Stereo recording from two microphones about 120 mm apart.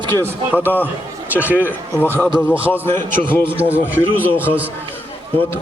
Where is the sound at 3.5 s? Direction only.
15° right (ahead or behind).